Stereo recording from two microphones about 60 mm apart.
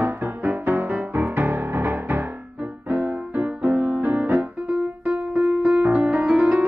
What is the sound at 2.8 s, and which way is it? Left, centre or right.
Music, right.